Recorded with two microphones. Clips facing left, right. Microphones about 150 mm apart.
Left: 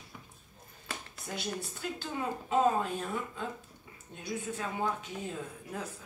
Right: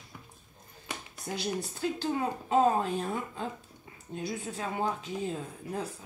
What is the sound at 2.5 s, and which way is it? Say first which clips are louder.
Speech: right 3 dB; 30° right (ahead or behind).